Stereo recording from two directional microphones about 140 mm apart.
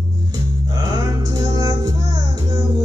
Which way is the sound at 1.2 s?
25° right (ahead or behind).